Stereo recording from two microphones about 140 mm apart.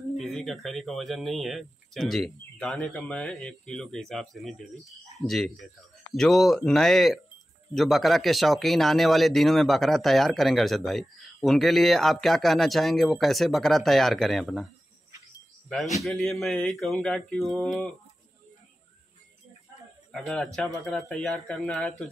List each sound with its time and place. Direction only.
0.2 s speech: centre (ahead or behind)
15.7 s speech: centre (ahead or behind)
20.1 s speech: centre (ahead or behind)